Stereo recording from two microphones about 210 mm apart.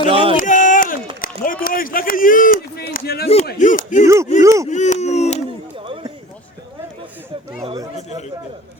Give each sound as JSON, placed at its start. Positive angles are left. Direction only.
{"t": 0.0, "sound": "speech", "side_deg": -25}
{"t": 0.3, "sound": "a sound", "side_deg": 40}
{"t": 1.2, "sound": "run", "side_deg": 45}
{"t": 1.6, "sound": "speech", "side_deg": 40}
{"t": 4.0, "sound": "speech", "side_deg": -15}
{"t": 4.7, "sound": "a sound", "side_deg": 35}
{"t": 5.8, "sound": "run", "side_deg": -25}